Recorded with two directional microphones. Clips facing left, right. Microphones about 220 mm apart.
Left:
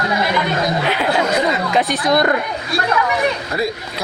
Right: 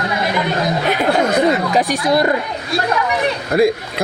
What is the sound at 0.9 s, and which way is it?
Speech, 45° right (ahead or behind).